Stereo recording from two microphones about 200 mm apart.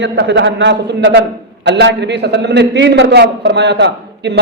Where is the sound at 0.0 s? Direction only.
65° right (ahead or behind).